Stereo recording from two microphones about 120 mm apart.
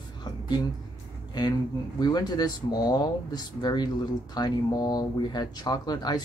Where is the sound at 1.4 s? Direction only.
35° left (ahead or behind).